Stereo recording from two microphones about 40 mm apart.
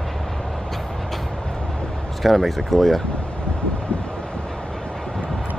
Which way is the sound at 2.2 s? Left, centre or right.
Centre.